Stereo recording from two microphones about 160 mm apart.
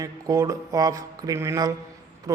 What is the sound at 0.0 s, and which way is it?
A man's voice, 20° right (ahead or behind).